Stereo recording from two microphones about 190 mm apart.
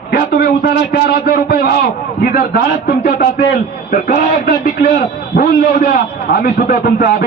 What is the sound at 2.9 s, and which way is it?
Speech, 50° left (ahead or behind).